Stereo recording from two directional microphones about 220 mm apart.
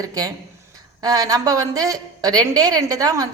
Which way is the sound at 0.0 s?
15° right (ahead or behind).